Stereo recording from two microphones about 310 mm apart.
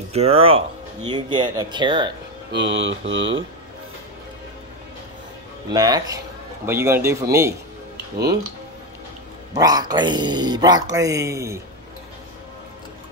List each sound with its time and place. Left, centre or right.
0.1 s speech: centre
2.5 s speech: right
5.7 s a man's voice: centre
9.6 s speech: centre